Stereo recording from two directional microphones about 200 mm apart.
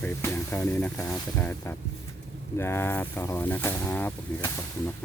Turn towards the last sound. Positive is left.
turn(degrees=10)  # may be behind; listen again after turning